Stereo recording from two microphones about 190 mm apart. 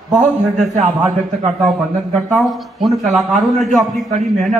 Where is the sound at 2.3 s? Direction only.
Centre (ahead or behind).